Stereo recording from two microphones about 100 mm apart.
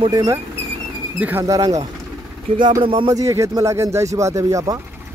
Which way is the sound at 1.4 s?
35° right (ahead or behind).